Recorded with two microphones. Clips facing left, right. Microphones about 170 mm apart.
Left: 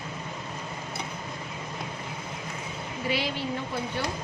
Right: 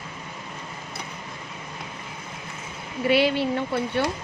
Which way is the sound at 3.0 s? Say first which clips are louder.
Right 9 dB; 65° right (ahead or behind).